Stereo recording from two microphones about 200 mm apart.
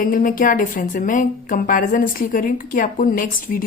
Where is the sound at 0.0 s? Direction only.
45° left (ahead or behind).